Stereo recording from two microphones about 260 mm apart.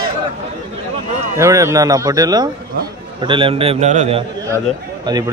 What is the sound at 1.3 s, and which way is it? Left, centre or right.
A man's voice, centre.